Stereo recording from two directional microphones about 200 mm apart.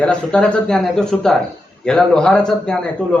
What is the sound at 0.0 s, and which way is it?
A man's voice, 5° left (ahead or behind).